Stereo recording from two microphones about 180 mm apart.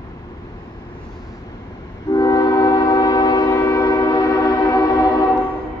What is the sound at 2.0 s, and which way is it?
Train, 20° left (ahead or behind).